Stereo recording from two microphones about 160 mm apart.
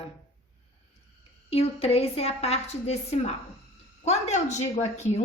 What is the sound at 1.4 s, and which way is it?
A woman's voice, 40° left (ahead or behind).